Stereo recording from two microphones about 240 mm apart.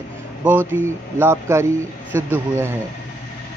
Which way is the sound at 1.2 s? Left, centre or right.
Centre.